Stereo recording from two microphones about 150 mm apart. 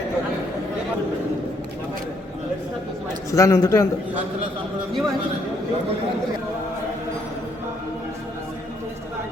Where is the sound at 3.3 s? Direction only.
20° left (ahead or behind).